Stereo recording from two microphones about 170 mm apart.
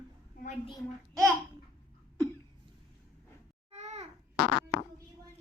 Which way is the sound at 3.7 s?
40° right (ahead or behind).